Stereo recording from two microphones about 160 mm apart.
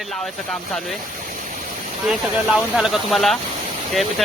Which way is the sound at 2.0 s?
5° right (ahead or behind).